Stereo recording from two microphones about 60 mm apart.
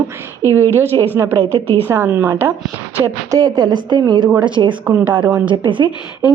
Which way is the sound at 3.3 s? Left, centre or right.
Right.